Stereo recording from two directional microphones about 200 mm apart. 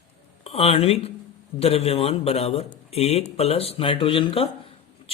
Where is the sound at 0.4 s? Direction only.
30° left (ahead or behind).